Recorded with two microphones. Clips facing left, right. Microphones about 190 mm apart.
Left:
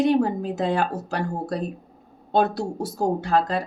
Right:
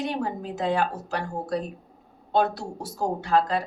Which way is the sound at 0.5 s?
35° left (ahead or behind).